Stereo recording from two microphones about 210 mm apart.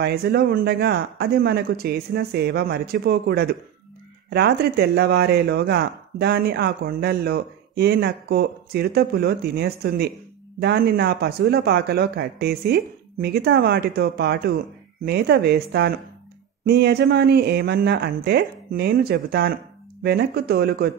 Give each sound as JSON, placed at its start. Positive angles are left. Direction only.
{"t": 0.0, "sound": "speech", "side_deg": -50}